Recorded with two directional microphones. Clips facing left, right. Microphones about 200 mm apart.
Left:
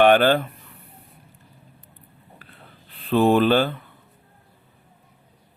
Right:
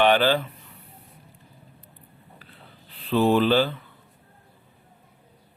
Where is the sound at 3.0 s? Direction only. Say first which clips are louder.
Left 3 dB; 50° left (ahead or behind).